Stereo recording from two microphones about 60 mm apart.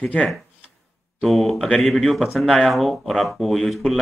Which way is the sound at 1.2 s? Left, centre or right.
Centre.